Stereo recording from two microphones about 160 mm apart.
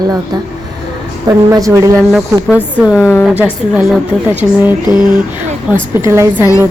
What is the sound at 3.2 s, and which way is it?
A woman's voice, 10° right (ahead or behind).